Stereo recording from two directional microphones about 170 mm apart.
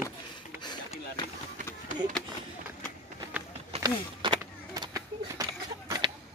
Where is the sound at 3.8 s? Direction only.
25° right (ahead or behind).